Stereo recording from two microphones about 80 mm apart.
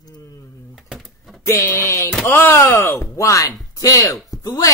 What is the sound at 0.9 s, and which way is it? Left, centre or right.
Typewriter, centre.